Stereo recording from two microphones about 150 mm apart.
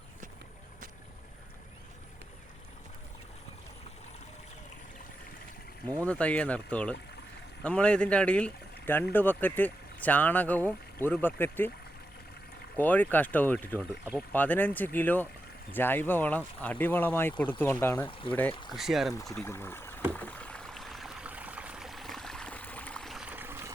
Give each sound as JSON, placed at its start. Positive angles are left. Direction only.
{"t": 6.0, "sound": "speech", "side_deg": 10}
{"t": 12.7, "sound": "speech", "side_deg": 10}
{"t": 18.0, "sound": "speech", "side_deg": 35}
{"t": 18.7, "sound": "speech", "side_deg": 0}
{"t": 19.5, "sound": "speech", "side_deg": 15}
{"t": 20.1, "sound": "stream", "side_deg": 10}
{"t": 23.3, "sound": "trickle", "side_deg": -15}